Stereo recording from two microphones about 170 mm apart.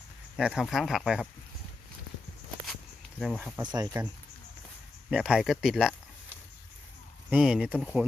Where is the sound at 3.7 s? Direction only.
20° right (ahead or behind).